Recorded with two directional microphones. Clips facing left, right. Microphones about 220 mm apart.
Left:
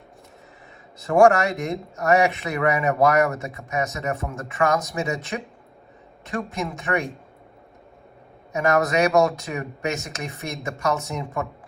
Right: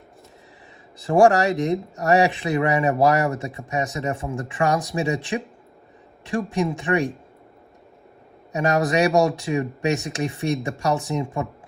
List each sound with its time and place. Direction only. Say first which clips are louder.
0.9 s speech: even; 30° right (ahead or behind)
8.7 s speech: even; 35° right (ahead or behind)